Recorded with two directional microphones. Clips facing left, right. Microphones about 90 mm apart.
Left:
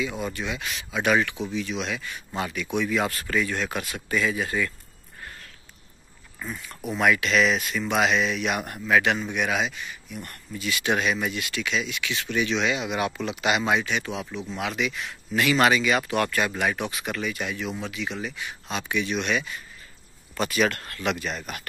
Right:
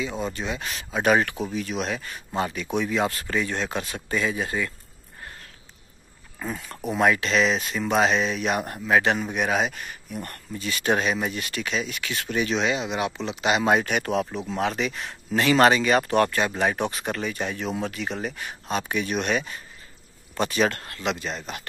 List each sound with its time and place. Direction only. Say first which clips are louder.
0.0 s speech: right 1 dB; 30° right (ahead or behind)
6.4 s speech: right 3 dB; 35° right (ahead or behind)
13.7 s speech: right 4 dB; 50° right (ahead or behind)
14.5 s speech: right 1 dB; 35° right (ahead or behind)